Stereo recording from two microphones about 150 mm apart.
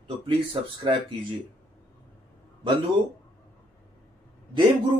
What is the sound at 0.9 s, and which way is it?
Speech, 30° right (ahead or behind).